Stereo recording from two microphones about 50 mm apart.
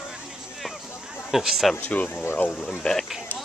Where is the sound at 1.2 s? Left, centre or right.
Centre.